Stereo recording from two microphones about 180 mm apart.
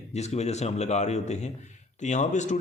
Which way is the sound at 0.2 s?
40° left (ahead or behind).